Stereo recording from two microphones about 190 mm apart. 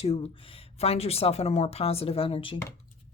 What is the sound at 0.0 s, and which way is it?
Speech, 30° left (ahead or behind).